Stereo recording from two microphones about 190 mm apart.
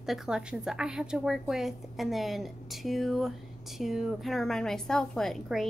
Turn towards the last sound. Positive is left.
turn(degrees=0)  # may be behind; listen again after turning